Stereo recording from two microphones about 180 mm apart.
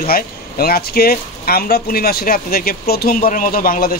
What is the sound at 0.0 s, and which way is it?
Speech, 55° left (ahead or behind).